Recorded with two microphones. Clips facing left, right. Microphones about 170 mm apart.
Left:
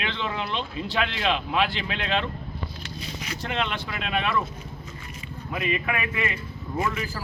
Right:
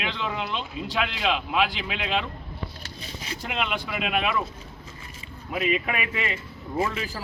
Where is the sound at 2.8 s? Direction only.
30° right (ahead or behind).